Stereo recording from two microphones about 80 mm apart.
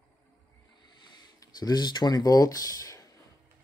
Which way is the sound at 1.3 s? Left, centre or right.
Left.